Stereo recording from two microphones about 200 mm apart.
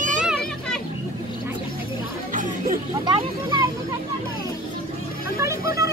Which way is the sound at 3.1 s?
20° right (ahead or behind).